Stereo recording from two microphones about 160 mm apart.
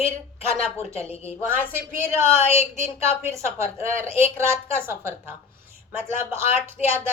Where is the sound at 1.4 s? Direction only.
15° right (ahead or behind).